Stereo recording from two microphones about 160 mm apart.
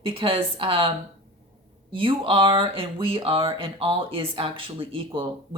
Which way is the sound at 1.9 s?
35° right (ahead or behind).